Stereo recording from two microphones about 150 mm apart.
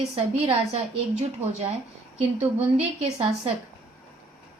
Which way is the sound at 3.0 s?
40° right (ahead or behind).